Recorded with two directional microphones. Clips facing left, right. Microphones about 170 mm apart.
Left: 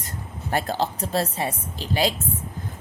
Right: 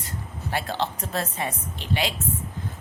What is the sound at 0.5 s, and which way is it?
A woman's voice, 40° left (ahead or behind).